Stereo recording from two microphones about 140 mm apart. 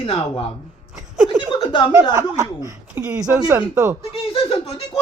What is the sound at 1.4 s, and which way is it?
Chuckle, 35° left (ahead or behind).